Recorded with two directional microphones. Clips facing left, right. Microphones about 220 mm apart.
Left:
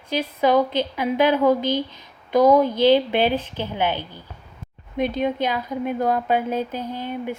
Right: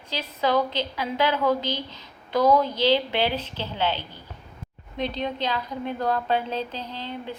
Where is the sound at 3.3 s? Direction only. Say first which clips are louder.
Left 5 dB; 50° left (ahead or behind).